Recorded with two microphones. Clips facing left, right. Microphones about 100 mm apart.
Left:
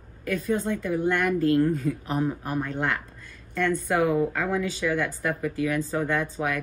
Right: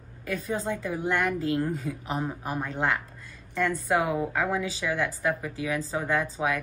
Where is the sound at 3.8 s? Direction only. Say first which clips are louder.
Left 4 dB; centre (ahead or behind).